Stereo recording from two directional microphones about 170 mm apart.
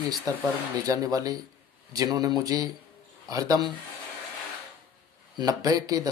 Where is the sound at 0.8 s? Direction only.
20° right (ahead or behind).